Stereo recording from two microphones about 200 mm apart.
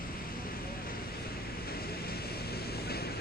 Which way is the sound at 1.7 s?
50° left (ahead or behind).